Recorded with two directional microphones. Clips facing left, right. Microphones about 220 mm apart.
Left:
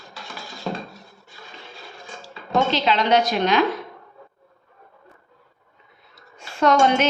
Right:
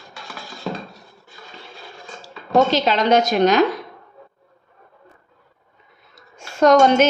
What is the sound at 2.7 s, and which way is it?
Speech, 45° right (ahead or behind).